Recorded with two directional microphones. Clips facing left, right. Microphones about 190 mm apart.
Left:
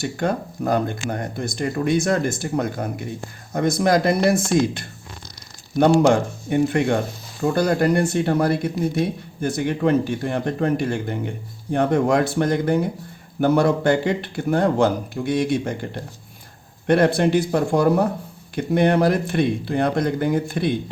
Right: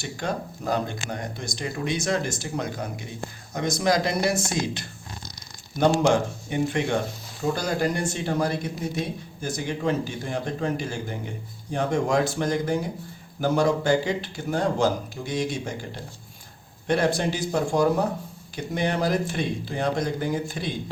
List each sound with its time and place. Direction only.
0.0 s a man's voice: 55° left (ahead or behind)